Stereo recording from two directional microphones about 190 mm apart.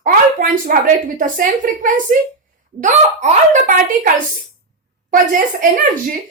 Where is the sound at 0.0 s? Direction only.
45° right (ahead or behind).